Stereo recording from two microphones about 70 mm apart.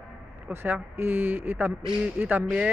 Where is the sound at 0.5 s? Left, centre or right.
Right.